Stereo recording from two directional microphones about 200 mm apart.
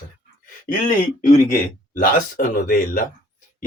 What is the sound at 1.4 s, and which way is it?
A man's voice, 45° left (ahead or behind).